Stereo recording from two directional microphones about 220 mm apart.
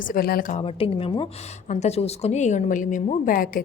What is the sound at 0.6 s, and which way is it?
A woman's voice, 25° left (ahead or behind).